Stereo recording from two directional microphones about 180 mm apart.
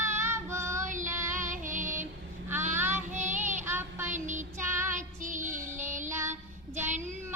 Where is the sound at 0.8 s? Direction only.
45° right (ahead or behind).